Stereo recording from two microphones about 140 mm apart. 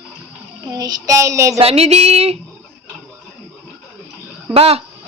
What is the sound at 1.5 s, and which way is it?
Speech, 45° right (ahead or behind).